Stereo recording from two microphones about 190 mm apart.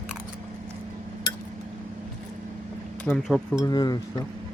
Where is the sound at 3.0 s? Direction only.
5° left (ahead or behind).